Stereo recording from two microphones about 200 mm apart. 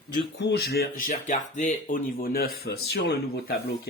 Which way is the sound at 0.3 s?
60° left (ahead or behind).